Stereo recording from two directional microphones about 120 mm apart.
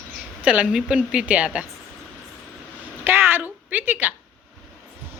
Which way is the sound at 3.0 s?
20° right (ahead or behind).